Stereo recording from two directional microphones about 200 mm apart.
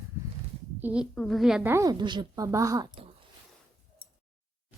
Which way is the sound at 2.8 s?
30° right (ahead or behind).